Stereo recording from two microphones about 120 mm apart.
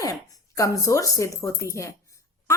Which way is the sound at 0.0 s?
30° left (ahead or behind).